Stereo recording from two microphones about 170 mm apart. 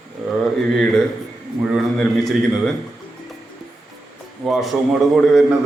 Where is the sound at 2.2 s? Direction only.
Centre (ahead or behind).